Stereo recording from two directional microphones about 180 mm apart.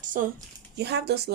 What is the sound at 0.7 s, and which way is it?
Speech, 65° right (ahead or behind).